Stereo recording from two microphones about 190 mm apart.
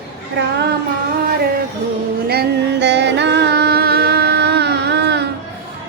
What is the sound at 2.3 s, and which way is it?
Music, 60° right (ahead or behind).